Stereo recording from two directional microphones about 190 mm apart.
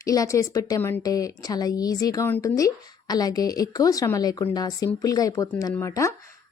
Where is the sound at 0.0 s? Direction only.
15° left (ahead or behind).